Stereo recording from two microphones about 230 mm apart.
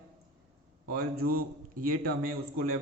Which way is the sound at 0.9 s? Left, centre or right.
Right.